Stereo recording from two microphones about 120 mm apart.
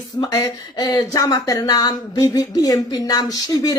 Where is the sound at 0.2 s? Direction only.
30° left (ahead or behind).